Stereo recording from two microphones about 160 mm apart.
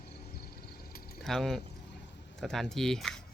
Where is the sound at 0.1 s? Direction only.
80° left.